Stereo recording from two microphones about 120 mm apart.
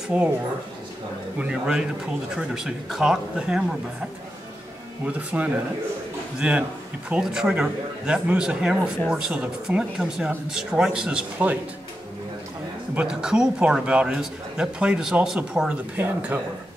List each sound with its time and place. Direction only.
0.1 s a man's voice: 10° right (ahead or behind)
1.4 s a man's voice: 10° right (ahead or behind)
5.0 s a man's voice: 10° right (ahead or behind)
12.9 s a man's voice: 5° right (ahead or behind)
16.0 s a man's voice: 15° right (ahead or behind)